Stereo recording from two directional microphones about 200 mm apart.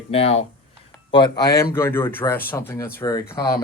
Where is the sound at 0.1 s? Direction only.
30° left (ahead or behind).